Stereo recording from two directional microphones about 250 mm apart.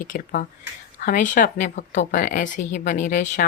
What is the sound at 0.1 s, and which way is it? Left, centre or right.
Speech, left.